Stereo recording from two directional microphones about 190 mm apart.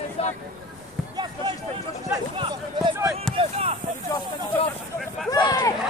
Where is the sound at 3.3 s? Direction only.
30° right (ahead or behind).